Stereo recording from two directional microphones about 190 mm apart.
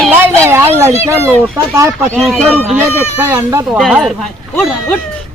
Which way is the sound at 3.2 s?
10° right (ahead or behind).